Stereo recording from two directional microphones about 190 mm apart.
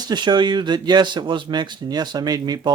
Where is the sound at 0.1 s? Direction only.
25° right (ahead or behind).